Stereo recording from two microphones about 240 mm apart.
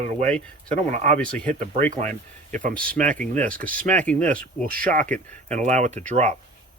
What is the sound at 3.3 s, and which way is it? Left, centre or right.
Speech, right.